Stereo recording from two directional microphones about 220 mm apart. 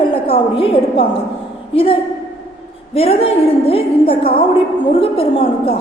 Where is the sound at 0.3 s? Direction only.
25° left (ahead or behind).